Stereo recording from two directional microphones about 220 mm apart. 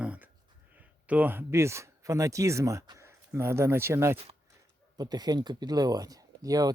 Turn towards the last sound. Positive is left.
turn(degrees=-15)  # may be behind; listen again after turning